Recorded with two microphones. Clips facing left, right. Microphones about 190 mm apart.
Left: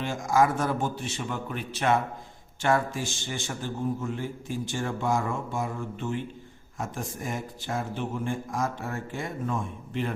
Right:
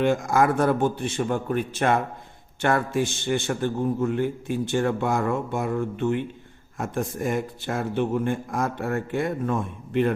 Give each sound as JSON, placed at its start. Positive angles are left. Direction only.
{"t": 0.0, "sound": "a man's voice", "side_deg": -60}